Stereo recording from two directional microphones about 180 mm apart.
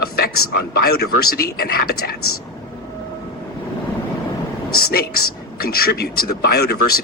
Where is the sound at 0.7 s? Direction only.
60° left (ahead or behind).